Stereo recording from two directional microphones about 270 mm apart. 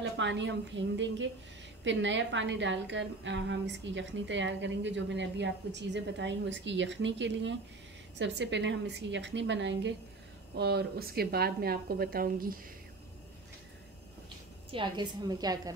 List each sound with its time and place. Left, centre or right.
0.2 s a woman's voice: right
14.7 s a woman's voice: centre